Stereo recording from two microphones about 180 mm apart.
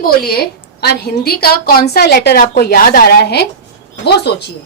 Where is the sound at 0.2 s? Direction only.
55° left (ahead or behind).